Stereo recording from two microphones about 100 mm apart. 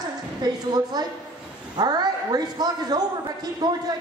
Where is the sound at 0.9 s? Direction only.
45° right (ahead or behind).